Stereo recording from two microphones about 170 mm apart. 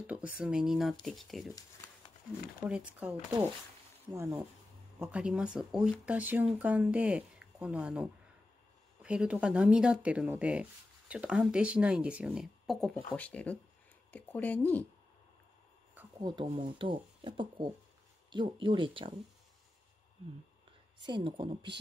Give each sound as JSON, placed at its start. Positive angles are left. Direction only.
{"t": 0.0, "sound": "speech", "side_deg": -5}
{"t": 2.6, "sound": "speech", "side_deg": -10}
{"t": 16.2, "sound": "speech", "side_deg": -25}
{"t": 21.0, "sound": "speech", "side_deg": -30}